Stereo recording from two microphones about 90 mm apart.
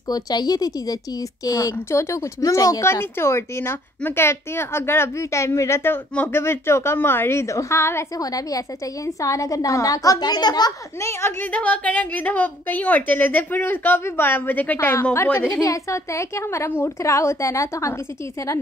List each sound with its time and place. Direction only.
0.1 s a woman's voice: 50° left (ahead or behind)
2.8 s a woman's voice: 30° left (ahead or behind)
8.2 s a woman's voice: 40° left (ahead or behind)
11.0 s a woman's voice: 30° left (ahead or behind)
11.5 s a woman's voice: 15° left (ahead or behind)
15.6 s a woman's voice: 35° left (ahead or behind)